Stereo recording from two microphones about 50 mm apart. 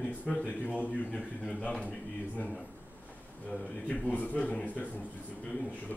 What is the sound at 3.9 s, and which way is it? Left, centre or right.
A man's voice, left.